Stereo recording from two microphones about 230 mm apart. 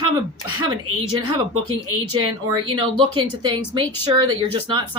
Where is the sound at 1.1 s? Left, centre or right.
Right.